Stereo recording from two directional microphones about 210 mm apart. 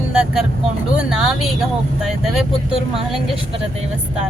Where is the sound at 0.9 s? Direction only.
5° right (ahead or behind).